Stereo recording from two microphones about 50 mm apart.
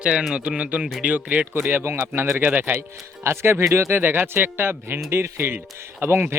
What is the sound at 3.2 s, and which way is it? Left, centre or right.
Speech, right.